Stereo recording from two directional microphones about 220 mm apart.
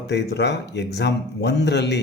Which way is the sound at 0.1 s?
50° left (ahead or behind).